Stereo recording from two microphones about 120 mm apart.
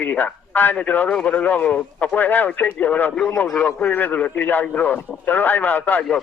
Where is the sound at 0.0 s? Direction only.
15° left (ahead or behind).